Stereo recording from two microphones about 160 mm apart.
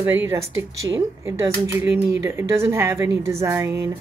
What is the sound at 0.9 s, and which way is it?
Speech, 20° right (ahead or behind).